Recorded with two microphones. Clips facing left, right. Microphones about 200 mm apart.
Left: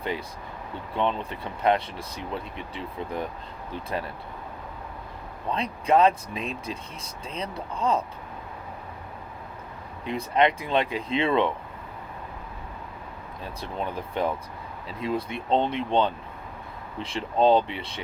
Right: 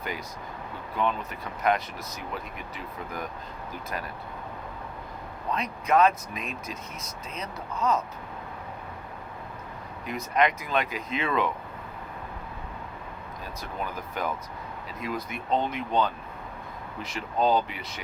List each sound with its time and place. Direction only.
0.9 s speech: 30° left (ahead or behind)
5.5 s speech: 30° left (ahead or behind)
10.1 s speech: 30° left (ahead or behind)
13.4 s speech: 30° left (ahead or behind)